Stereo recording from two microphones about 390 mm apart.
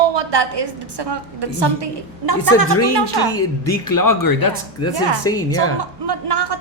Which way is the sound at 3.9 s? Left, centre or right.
Left.